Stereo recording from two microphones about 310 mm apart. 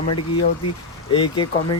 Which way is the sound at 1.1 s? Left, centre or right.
Centre.